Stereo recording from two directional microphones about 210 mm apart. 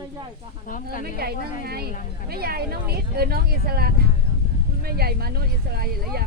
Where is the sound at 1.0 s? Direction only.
45° right (ahead or behind).